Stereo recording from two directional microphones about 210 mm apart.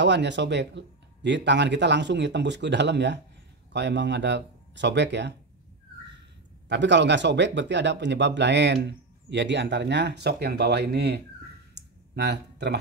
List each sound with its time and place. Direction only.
0.0 s speech: 55° right (ahead or behind)
6.7 s speech: 55° right (ahead or behind)
11.7 s a sound: 55° right (ahead or behind)